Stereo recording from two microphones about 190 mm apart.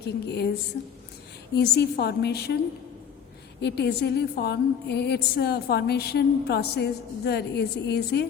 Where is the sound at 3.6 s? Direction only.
60° left (ahead or behind).